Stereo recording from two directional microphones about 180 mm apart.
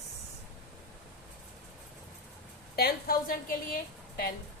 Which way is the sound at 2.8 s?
60° left (ahead or behind).